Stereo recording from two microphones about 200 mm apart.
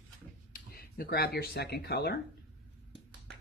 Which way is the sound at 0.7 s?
50° left (ahead or behind).